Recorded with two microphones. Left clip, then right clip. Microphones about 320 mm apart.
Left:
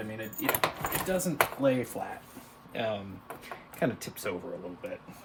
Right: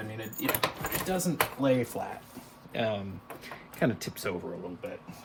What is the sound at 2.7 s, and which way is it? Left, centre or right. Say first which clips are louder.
Speech: right 2 dB; right.